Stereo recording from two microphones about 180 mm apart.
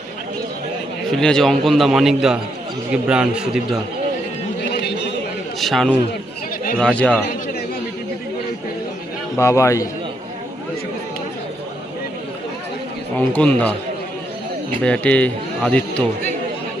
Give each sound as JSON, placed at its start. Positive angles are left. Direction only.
{"t": 1.1, "sound": "a man's voice", "side_deg": 5}
{"t": 4.7, "sound": "a sound", "side_deg": 70}
{"t": 5.5, "sound": "a man's voice", "side_deg": 0}
{"t": 9.4, "sound": "speech", "side_deg": 15}
{"t": 13.1, "sound": "speech", "side_deg": 5}
{"t": 14.8, "sound": "speech", "side_deg": 5}